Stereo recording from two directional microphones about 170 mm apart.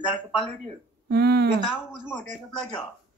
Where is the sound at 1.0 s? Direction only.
70° right (ahead or behind).